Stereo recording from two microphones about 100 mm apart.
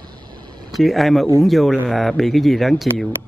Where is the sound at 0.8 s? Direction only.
Centre (ahead or behind).